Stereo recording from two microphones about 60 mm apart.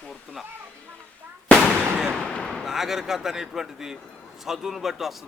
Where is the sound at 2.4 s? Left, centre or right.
Centre.